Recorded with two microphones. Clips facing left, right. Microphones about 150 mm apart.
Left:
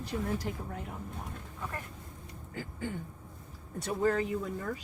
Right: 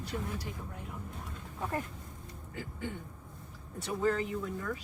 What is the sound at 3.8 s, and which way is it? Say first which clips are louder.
Speech: left 2 dB; 45° left (ahead or behind).